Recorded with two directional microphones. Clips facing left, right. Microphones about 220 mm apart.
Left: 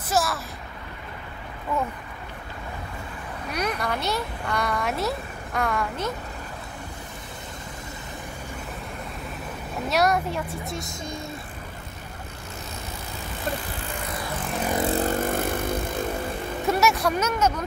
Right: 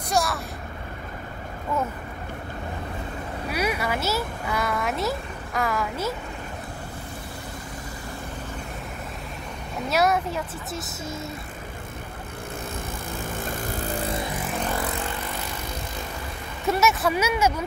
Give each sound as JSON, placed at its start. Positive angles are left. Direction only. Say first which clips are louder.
{"t": 0.1, "sound": "a sound", "louder": "even", "side_deg": 0}
{"t": 3.4, "sound": "speech", "louder": "right 1 dB", "side_deg": -5}
{"t": 9.8, "sound": "speech", "louder": "even", "side_deg": 0}
{"t": 13.4, "sound": "vehicle", "louder": "left 2 dB", "side_deg": -45}
{"t": 14.9, "sound": "vehicle", "louder": "left 8 dB", "side_deg": 40}
{"t": 16.6, "sound": "speech", "louder": "even", "side_deg": 0}